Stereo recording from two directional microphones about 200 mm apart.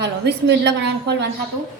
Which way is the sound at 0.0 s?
60° right (ahead or behind).